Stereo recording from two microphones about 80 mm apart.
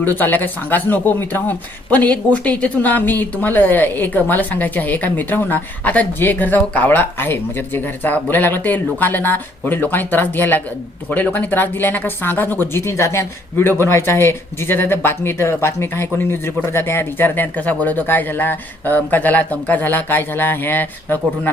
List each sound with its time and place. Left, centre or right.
0.0 s speech: left